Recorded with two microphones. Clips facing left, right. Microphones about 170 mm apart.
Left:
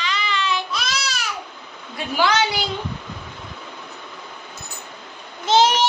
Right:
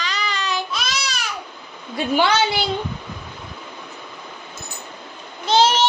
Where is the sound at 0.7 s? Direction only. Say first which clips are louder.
Even; centre (ahead or behind).